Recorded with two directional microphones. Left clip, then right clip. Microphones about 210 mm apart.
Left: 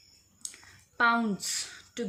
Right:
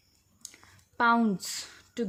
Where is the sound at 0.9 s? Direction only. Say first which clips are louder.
Right 1 dB; 50° right (ahead or behind).